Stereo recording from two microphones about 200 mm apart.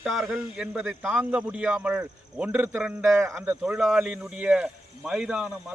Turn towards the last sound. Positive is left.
turn(degrees=-5)  # may be behind; listen again after turning